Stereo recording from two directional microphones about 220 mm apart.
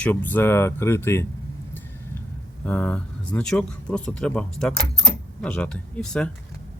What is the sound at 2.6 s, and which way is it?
Speech, 5° left (ahead or behind).